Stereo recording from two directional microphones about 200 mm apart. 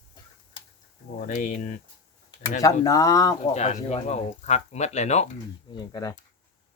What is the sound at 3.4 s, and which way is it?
Speech, 35° left (ahead or behind).